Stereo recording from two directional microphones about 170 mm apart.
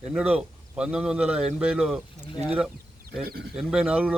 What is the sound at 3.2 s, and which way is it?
Speech, 65° right (ahead or behind).